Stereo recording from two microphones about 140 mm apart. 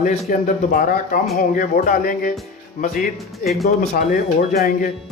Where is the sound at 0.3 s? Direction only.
85° left.